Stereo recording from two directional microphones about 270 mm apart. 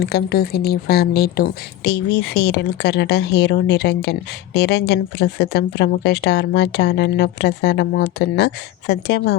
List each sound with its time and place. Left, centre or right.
0.0 s speech: left